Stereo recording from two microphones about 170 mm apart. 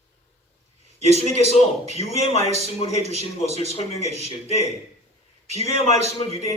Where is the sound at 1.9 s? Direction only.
40° left (ahead or behind).